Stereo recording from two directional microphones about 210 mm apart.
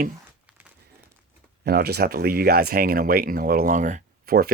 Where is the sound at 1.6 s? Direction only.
50° right (ahead or behind).